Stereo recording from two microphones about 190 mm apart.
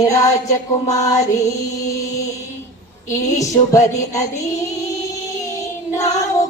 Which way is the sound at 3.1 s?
15° left (ahead or behind).